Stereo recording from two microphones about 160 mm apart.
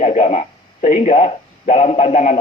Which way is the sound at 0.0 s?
45° left (ahead or behind).